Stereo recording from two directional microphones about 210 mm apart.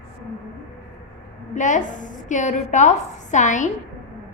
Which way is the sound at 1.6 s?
35° left (ahead or behind).